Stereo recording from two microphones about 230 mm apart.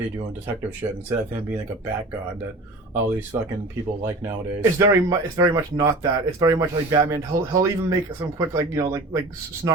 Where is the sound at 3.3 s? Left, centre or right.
Centre.